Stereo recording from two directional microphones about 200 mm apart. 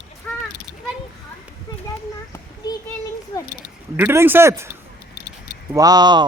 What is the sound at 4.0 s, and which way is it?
Speech, 10° right (ahead or behind).